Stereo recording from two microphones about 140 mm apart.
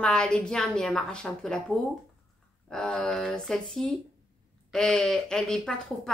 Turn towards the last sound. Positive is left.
turn(degrees=5)  # may be behind; listen again after turning